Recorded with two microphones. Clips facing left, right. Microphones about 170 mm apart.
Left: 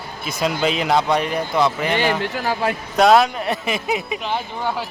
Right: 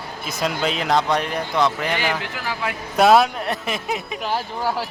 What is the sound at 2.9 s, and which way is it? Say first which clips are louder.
Speech: even; centre (ahead or behind).